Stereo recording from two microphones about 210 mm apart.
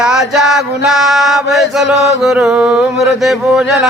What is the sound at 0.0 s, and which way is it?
Mantra, centre (ahead or behind).